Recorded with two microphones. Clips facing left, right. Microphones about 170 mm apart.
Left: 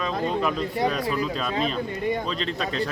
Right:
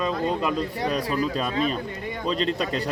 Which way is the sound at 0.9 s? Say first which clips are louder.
Right 1 dB; 40° right (ahead or behind).